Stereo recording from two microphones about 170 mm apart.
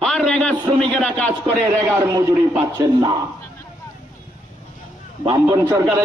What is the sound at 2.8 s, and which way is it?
Speech, 25° right (ahead or behind).